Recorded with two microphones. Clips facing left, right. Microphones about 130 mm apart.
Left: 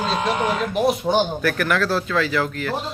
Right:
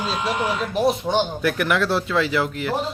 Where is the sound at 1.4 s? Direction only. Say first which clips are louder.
Even; 20° right (ahead or behind).